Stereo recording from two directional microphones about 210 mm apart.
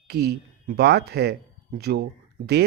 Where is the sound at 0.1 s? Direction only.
50° right (ahead or behind).